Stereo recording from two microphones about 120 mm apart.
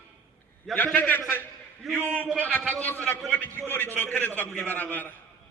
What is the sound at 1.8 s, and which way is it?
Speech, centre (ahead or behind).